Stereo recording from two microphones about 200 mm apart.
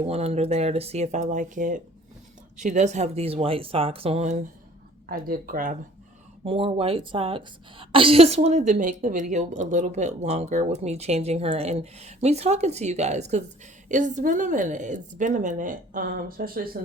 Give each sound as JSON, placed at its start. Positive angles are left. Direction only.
{"t": 0.0, "sound": "a woman's voice", "side_deg": -30}
{"t": 5.0, "sound": "speech", "side_deg": -45}
{"t": 6.4, "sound": "a woman's voice", "side_deg": -25}